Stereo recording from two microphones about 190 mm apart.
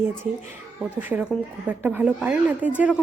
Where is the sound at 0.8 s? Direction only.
10° right (ahead or behind).